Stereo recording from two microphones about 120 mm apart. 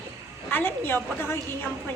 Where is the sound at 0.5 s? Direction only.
20° left (ahead or behind).